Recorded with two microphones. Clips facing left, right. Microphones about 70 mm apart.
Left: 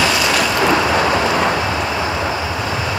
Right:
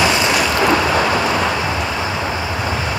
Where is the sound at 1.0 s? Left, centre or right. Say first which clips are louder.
Left 1 dB; centre.